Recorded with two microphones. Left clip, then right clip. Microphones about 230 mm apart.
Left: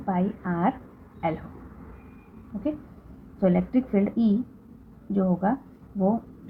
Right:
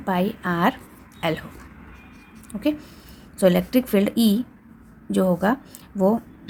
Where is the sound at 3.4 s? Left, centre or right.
Right.